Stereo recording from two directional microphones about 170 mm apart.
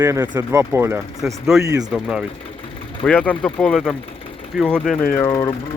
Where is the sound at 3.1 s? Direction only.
5° left (ahead or behind).